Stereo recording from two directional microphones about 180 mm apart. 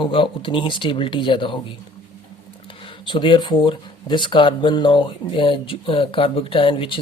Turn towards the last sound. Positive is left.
turn(degrees=30)  # may be behind; listen again after turning